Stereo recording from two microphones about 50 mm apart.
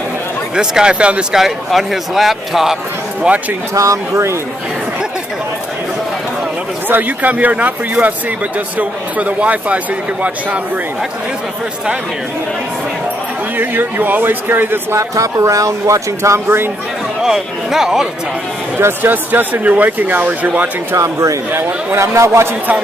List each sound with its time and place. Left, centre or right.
0.6 s speech: centre
1.3 s speech: centre
3.3 s speech: right
3.7 s speech: right
6.9 s speech: right
13.6 s speech: right
15.0 s speech: right
17.2 s speech: centre
19.0 s speech: right
20.9 s speech: right
21.9 s a man's voice: right